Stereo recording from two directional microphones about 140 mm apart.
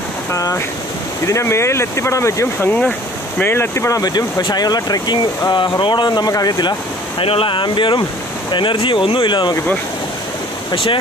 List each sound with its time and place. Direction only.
0.3 s speech: 25° left (ahead or behind)
7.2 s speech: 40° left (ahead or behind)
10.7 s speech: 40° left (ahead or behind)